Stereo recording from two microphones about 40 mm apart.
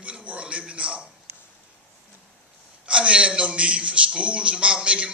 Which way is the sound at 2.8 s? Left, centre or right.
Right.